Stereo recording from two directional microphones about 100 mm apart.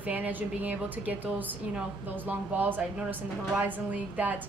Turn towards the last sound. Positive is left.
turn(degrees=-15)  # may be behind; listen again after turning